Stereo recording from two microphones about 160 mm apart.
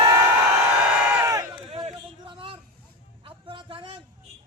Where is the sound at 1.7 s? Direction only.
35° right (ahead or behind).